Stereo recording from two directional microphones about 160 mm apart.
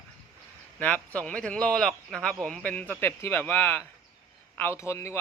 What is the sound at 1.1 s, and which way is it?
Speech, 5° left (ahead or behind).